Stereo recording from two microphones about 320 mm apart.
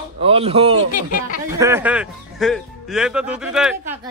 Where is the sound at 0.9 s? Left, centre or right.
Left.